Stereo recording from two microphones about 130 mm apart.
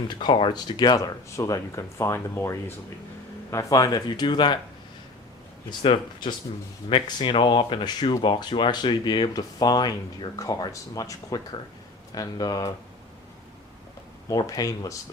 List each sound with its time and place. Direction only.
0.1 s speech: 40° left (ahead or behind)
5.8 s speech: 40° left (ahead or behind)
14.3 s speech: 25° left (ahead or behind)